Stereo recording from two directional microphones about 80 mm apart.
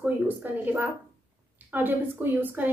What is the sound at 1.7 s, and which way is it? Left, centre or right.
A woman's voice, right.